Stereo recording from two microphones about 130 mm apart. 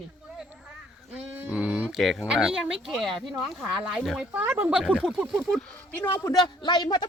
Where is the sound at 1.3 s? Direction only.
10° right (ahead or behind).